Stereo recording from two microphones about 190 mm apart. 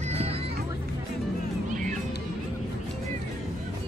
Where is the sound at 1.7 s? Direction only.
40° right (ahead or behind).